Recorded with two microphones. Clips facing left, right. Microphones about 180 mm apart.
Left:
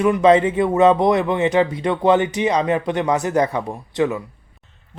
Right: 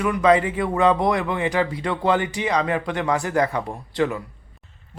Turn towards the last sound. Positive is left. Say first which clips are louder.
# left 3 dB
turn(degrees=20)  # may be behind; listen again after turning